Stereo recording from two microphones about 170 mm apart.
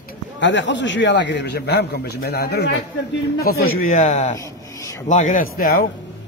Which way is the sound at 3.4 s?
60° left (ahead or behind).